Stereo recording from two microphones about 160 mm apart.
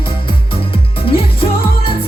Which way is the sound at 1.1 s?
35° left (ahead or behind).